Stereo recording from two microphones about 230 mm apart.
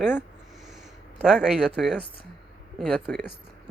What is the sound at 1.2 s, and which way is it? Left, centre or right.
Speech, centre.